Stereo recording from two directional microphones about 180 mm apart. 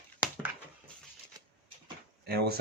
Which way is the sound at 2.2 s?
60° right (ahead or behind).